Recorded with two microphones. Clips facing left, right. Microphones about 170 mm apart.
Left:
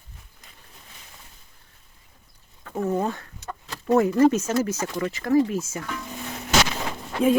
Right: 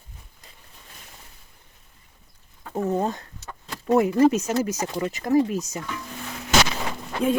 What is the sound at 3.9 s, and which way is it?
Speech, 15° right (ahead or behind).